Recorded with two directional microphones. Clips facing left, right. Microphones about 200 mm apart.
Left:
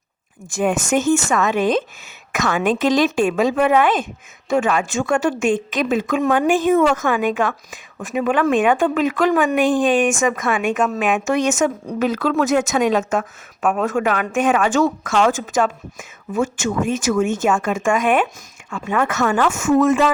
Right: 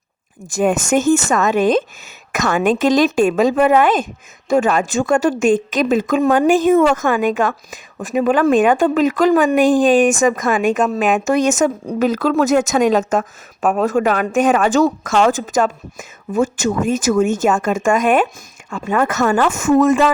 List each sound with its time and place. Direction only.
0.5 s a woman's voice: 45° right (ahead or behind)